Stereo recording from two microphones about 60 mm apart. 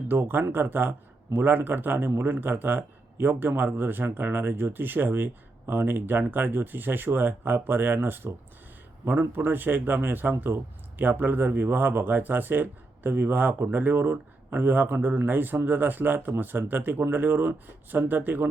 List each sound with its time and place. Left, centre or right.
0.1 s speech: right
9.3 s speech: right